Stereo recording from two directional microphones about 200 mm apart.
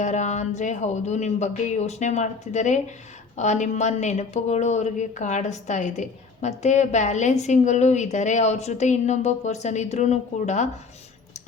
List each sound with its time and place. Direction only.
0.0 s a woman's voice: 35° left (ahead or behind)